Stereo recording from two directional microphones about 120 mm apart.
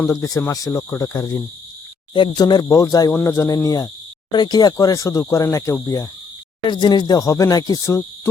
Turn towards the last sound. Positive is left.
turn(degrees=30)  # may be behind; listen again after turning